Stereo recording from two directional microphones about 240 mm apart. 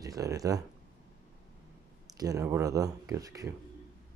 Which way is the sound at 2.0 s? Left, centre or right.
Centre.